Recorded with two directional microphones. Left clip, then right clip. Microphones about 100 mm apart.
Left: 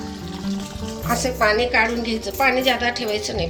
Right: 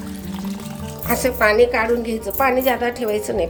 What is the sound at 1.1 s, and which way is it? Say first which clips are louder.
A woman's voice: right 2 dB; 85° right.